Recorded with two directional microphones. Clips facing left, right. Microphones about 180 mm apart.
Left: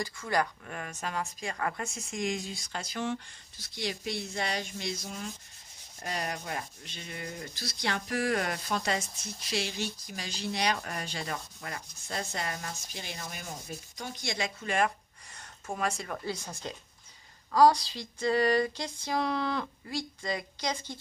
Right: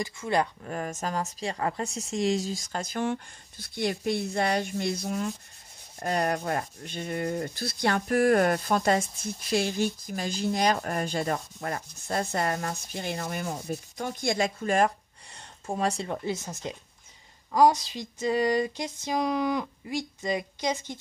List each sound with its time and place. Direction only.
0.0 s rub: 25° right (ahead or behind); by 14.5 s 50° right (ahead or behind)
14.6 s speech: 40° right (ahead or behind); by 20.8 s 20° right (ahead or behind)